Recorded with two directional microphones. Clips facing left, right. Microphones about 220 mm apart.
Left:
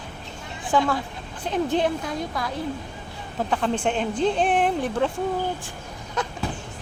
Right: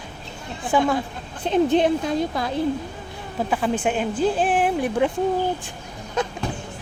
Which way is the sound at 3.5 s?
5° right (ahead or behind).